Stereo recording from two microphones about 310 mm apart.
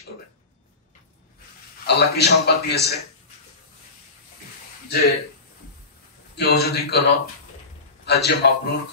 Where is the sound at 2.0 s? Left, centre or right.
Left.